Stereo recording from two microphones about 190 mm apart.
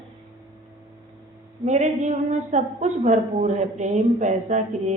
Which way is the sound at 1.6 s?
40° right (ahead or behind).